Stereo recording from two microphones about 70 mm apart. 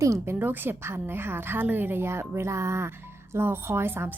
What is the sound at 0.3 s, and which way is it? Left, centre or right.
Speech, right.